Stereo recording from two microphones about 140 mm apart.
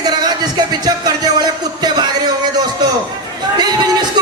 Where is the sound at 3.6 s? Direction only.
30° right (ahead or behind).